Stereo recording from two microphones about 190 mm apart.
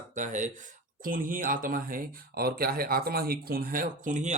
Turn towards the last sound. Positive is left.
turn(degrees=-40)  # may be behind; listen again after turning